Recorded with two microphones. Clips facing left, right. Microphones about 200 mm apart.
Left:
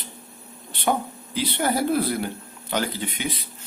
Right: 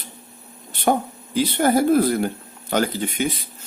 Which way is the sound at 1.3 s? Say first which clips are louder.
Right 6 dB; 45° right (ahead or behind).